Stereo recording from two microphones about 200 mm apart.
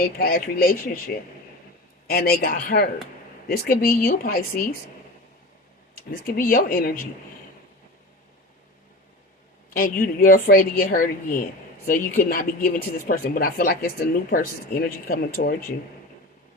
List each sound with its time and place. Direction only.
0.0 s speech: 50° left (ahead or behind)
5.9 s speech: 45° left (ahead or behind)
9.7 s speech: 45° left (ahead or behind)